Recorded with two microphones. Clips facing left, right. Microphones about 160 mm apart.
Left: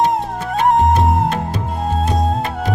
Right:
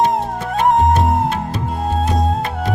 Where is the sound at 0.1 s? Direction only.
Centre (ahead or behind).